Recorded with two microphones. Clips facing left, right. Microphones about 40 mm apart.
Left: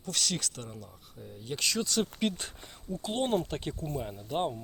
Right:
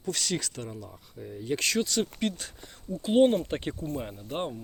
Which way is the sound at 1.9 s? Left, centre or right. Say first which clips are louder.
Right 1 dB; centre.